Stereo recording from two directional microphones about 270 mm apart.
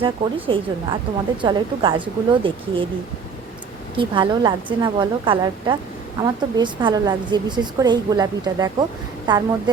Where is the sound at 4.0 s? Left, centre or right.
Centre.